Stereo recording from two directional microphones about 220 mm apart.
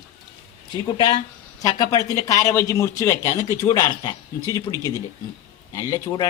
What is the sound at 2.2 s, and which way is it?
Speech, 15° left (ahead or behind).